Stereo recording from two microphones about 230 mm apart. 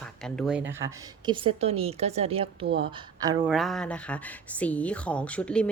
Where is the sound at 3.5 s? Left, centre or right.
Centre.